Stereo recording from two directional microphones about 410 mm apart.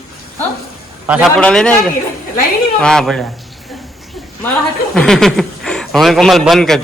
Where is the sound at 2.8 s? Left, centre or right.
Centre.